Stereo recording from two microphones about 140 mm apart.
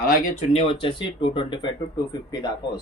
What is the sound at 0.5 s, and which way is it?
Speech, 40° left (ahead or behind).